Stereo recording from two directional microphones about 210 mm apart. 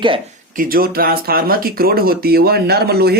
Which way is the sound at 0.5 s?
45° right (ahead or behind).